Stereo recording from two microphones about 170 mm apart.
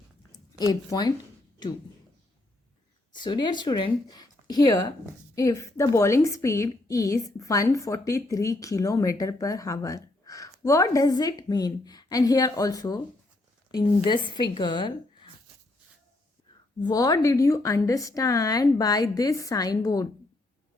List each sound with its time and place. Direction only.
0.7 s a woman's voice: 25° left (ahead or behind)
3.1 s a woman's voice: 25° left (ahead or behind)
16.8 s a woman's voice: 20° left (ahead or behind)